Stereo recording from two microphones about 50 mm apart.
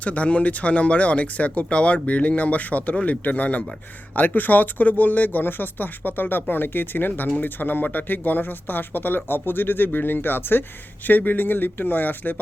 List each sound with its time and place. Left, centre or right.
0.0 s speech: left